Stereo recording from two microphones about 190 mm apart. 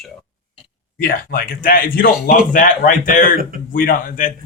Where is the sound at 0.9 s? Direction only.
50° left (ahead or behind).